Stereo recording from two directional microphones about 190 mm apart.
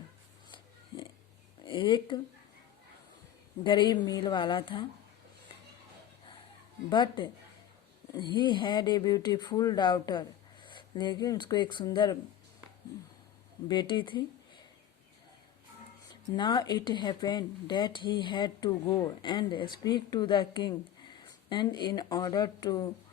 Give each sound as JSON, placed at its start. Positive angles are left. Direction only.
{"t": 0.5, "sound": "pig", "side_deg": 25}
{"t": 1.6, "sound": "speech", "side_deg": 25}
{"t": 3.6, "sound": "speech", "side_deg": 25}
{"t": 6.9, "sound": "speech", "side_deg": 25}
{"t": 13.7, "sound": "speech", "side_deg": 25}
{"t": 16.3, "sound": "speech", "side_deg": 20}